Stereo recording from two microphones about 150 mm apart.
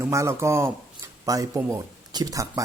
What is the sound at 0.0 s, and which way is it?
Speech, 20° right (ahead or behind).